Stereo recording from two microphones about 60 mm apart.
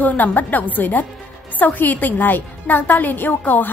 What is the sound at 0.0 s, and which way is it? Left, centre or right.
A woman's voice, left.